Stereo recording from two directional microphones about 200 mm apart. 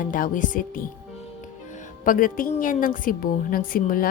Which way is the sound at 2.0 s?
45° left (ahead or behind).